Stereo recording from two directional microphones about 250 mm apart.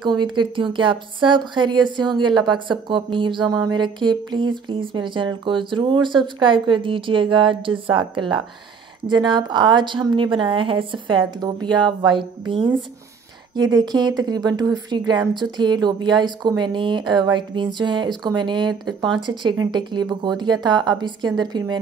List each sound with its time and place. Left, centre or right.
0.0 s speech: centre